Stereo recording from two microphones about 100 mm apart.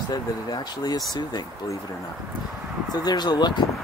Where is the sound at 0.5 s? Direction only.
45° left (ahead or behind).